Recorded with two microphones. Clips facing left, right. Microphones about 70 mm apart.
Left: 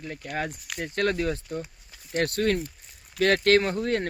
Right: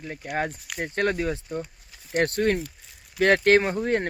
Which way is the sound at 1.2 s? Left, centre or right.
Centre.